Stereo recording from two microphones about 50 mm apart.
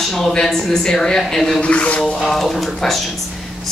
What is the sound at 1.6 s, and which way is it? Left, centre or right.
Speech, left.